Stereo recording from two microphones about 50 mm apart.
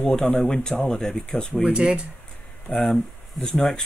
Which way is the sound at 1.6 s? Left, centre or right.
Centre.